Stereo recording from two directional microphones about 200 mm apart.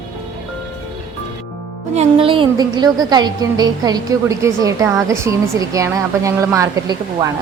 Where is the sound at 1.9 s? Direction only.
30° right (ahead or behind).